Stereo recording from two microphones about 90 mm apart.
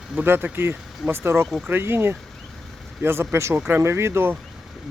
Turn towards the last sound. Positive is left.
turn(degrees=-25)  # may be behind; listen again after turning